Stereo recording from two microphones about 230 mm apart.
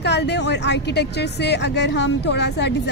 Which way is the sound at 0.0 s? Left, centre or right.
Left.